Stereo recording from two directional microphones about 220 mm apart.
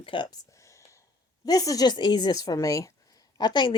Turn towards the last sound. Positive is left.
turn(degrees=20)  # may be behind; listen again after turning